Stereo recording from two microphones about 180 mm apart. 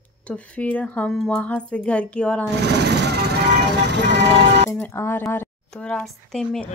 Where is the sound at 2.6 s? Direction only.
70° right (ahead or behind).